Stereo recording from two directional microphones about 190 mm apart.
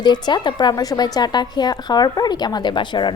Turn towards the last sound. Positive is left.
turn(degrees=25)  # may be behind; listen again after turning